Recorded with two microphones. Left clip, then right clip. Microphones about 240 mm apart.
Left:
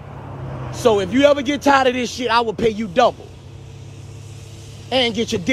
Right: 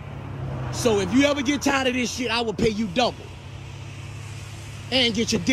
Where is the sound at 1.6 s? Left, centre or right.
Centre.